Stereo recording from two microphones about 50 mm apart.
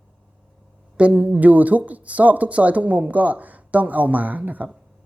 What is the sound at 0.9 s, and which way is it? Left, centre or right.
Speech, right.